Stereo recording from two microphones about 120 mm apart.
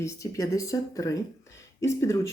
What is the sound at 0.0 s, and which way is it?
Speech, 25° left (ahead or behind).